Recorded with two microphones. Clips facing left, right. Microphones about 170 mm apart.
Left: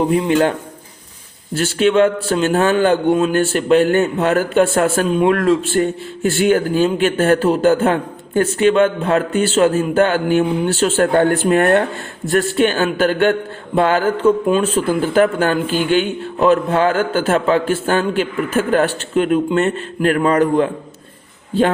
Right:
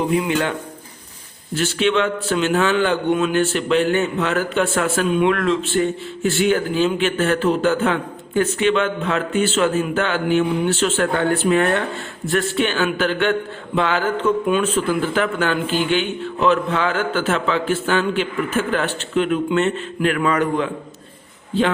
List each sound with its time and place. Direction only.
0.2 s speech: 35° left (ahead or behind)
1.5 s a man's voice: 40° left (ahead or behind)